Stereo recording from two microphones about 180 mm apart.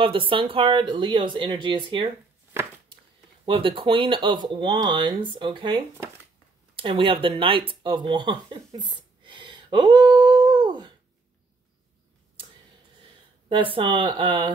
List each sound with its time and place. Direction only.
0.0 s speech: 30° right (ahead or behind)
3.4 s speech: 30° right (ahead or behind)
13.0 s speech: 30° right (ahead or behind)